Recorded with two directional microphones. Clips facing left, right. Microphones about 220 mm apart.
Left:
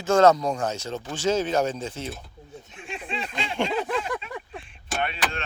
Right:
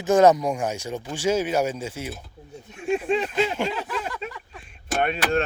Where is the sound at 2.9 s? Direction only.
40° right (ahead or behind).